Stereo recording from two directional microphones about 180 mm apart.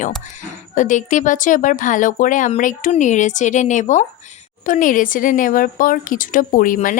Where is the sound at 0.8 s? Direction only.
45° left (ahead or behind).